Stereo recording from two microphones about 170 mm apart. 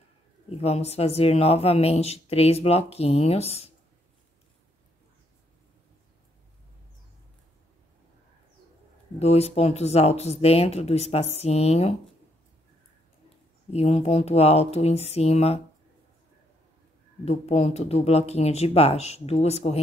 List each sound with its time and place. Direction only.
0.5 s speech: 35° left (ahead or behind)
9.2 s speech: 40° left (ahead or behind)
13.7 s speech: 40° left (ahead or behind)
17.2 s speech: 40° left (ahead or behind)